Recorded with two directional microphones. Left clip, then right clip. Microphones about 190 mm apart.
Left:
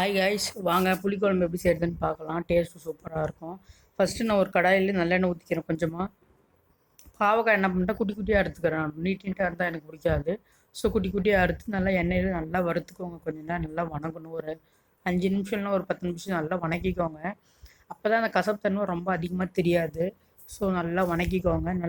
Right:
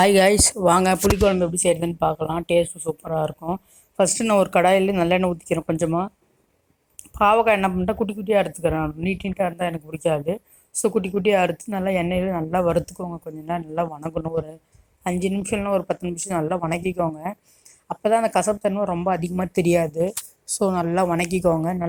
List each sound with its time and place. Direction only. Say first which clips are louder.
0.0 s speech: right 10 dB; 50° right (ahead or behind)
1.1 s speech: right 6 dB; 20° right (ahead or behind)
7.2 s speech: right 6 dB; 30° right (ahead or behind)